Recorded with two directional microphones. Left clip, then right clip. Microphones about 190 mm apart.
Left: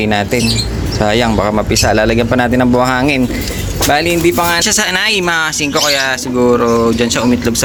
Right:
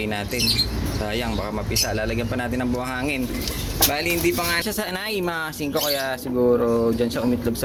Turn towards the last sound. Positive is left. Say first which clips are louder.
# left 10 dB
turn(degrees=0)  # may be behind; listen again after turning